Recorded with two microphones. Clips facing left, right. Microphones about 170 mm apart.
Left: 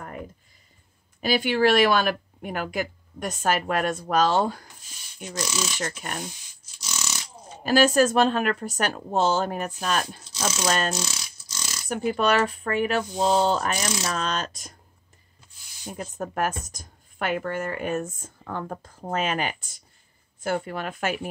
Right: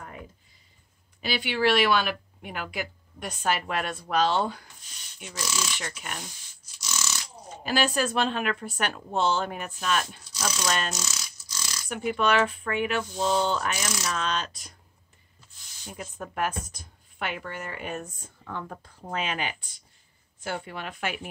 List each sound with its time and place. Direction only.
1.2 s a woman's voice: 45° left (ahead or behind)
6.8 s a sound: 20° left (ahead or behind)
7.6 s speech: 45° left (ahead or behind)
10.3 s speech: 25° left (ahead or behind)
10.7 s a woman's voice: 45° left (ahead or behind)
11.0 s a sound: 25° left (ahead or behind)
11.9 s a woman's voice: 40° left (ahead or behind)
15.9 s a woman's voice: 40° left (ahead or behind)